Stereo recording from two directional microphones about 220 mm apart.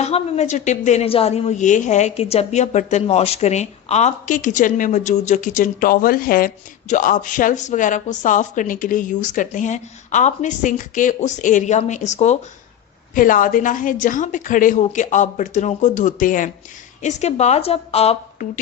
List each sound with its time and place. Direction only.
0.0 s a woman's voice: 30° left (ahead or behind)